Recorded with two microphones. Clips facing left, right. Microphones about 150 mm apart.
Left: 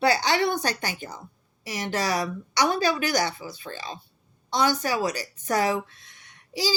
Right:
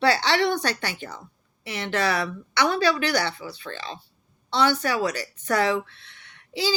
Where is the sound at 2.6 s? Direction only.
10° left (ahead or behind).